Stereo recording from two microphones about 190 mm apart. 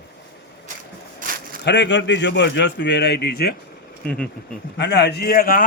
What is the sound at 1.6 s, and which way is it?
A man's voice, 65° left (ahead or behind).